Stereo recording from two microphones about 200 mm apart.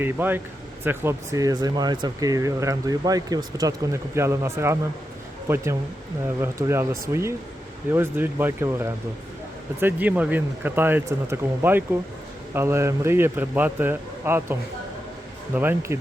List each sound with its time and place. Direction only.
0.0 s speech: 10° right (ahead or behind)
6.2 s speech: 10° right (ahead or behind)
15.5 s speech: 10° right (ahead or behind)